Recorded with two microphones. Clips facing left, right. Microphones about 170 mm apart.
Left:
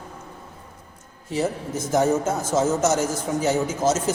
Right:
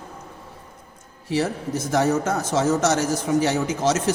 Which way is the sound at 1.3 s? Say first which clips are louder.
Right 1 dB; 70° right (ahead or behind).